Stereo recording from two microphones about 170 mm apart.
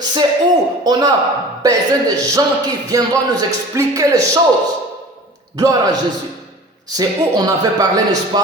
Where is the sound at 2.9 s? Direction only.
20° right (ahead or behind).